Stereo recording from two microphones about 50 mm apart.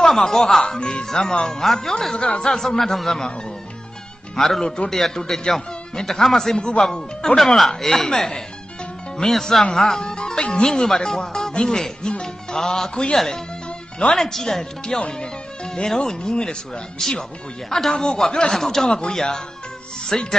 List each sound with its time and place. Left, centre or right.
0.0 s speech: centre
2.1 s speech: centre
4.4 s speech: centre
7.3 s speech: centre